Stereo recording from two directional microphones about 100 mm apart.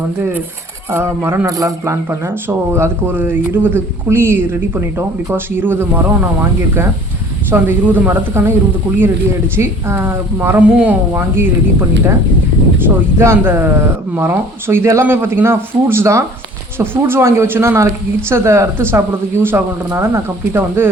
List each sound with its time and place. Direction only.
0.2 s speech: 15° right (ahead or behind)
1.5 s speech: 35° right (ahead or behind)
9.6 s speech: 25° right (ahead or behind)
13.1 s speech: 25° right (ahead or behind)